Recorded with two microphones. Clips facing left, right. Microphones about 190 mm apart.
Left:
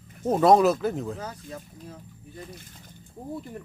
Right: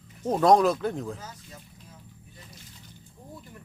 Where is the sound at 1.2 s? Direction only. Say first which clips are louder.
Left 8 dB; 55° left (ahead or behind).